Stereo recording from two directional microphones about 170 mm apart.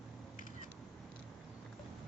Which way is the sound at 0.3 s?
50° left (ahead or behind).